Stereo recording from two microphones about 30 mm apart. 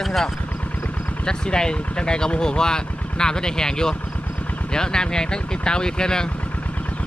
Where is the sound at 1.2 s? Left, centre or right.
Left.